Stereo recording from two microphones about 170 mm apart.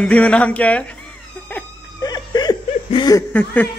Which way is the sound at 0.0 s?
5° left (ahead or behind).